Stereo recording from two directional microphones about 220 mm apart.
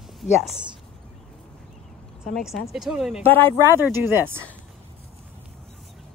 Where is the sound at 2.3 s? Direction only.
Centre (ahead or behind).